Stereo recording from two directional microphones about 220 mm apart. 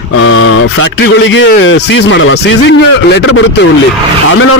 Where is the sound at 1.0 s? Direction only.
55° left (ahead or behind).